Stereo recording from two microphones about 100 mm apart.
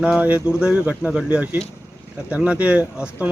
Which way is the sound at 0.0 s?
10° right (ahead or behind).